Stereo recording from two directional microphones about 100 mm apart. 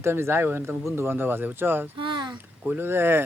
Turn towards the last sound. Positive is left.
turn(degrees=-25)  # may be behind; listen again after turning